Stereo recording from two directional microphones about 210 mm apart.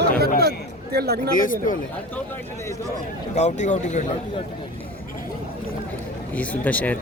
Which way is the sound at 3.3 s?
35° left (ahead or behind).